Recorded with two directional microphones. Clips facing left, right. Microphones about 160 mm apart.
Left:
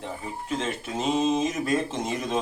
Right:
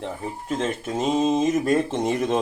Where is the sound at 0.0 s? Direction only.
45° right (ahead or behind).